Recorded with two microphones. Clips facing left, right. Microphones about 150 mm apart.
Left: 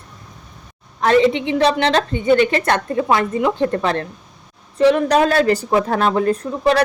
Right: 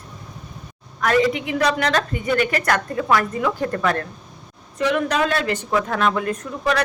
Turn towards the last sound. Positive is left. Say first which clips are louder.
# left 6 dB
turn(degrees=30)  # may be behind; listen again after turning